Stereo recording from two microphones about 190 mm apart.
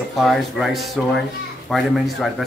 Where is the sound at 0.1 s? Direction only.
Centre (ahead or behind).